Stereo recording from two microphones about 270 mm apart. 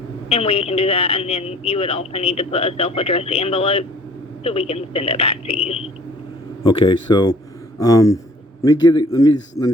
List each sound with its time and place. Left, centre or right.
0.3 s a man's voice: left